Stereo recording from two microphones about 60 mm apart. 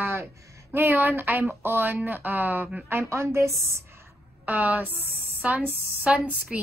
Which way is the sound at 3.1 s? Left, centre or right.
Right.